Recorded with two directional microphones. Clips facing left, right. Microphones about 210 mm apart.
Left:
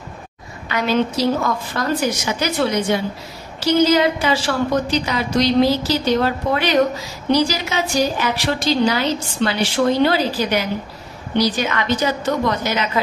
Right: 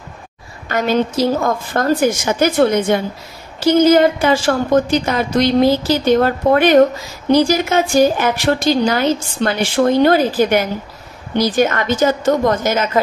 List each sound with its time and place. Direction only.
0.7 s a woman's voice: 45° right (ahead or behind)